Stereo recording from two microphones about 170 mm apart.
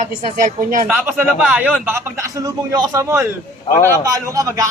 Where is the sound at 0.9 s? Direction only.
10° right (ahead or behind).